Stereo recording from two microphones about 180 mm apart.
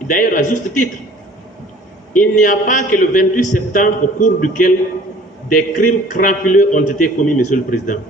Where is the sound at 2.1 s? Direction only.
45° left (ahead or behind).